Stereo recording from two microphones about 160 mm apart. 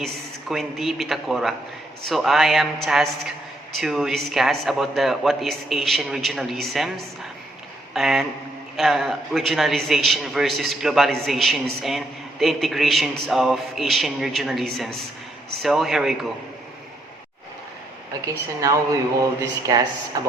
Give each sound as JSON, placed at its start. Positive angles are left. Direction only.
{"t": 0.0, "sound": "speech", "side_deg": 0}
{"t": 18.6, "sound": "speech", "side_deg": -20}